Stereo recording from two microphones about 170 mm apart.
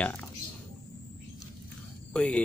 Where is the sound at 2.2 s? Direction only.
5° left (ahead or behind).